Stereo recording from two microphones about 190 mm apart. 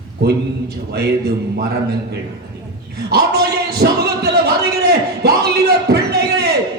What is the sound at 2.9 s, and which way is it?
A man's voice, 60° right (ahead or behind).